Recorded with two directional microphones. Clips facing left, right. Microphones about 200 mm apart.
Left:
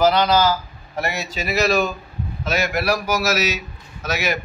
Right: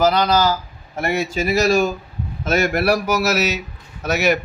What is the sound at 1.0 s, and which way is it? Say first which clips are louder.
Speech: right 7 dB; 50° right (ahead or behind).